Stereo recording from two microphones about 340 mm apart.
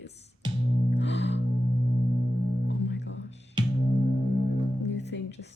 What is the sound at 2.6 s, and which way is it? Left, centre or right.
Music, left.